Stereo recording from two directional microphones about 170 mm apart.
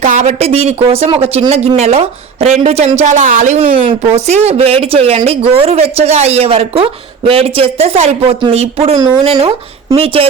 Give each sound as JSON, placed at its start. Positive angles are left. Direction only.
{"t": 0.0, "sound": "speech", "side_deg": -45}